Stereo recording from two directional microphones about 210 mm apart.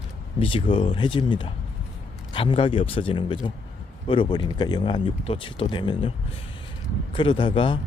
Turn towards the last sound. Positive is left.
turn(degrees=25)  # may be behind; listen again after turning